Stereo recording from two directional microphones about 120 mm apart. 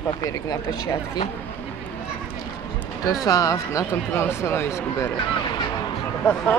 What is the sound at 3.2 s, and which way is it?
Speech, 30° left (ahead or behind).